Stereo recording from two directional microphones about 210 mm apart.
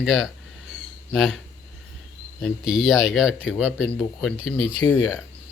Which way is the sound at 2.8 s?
5° right (ahead or behind).